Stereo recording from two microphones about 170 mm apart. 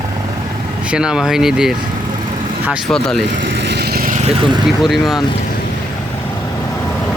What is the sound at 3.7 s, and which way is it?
Vehicle, 70° right (ahead or behind).